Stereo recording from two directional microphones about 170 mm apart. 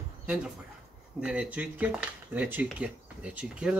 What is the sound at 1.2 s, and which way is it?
Speech, 5° right (ahead or behind).